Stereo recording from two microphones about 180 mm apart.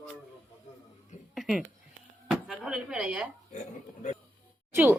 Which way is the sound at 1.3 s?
Centre (ahead or behind).